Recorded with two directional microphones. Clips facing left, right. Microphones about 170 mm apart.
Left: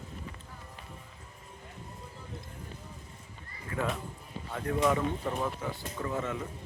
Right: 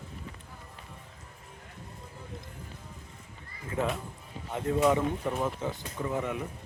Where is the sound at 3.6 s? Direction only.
20° right (ahead or behind).